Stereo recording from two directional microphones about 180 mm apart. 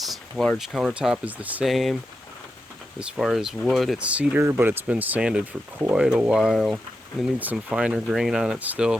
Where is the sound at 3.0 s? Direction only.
Centre (ahead or behind).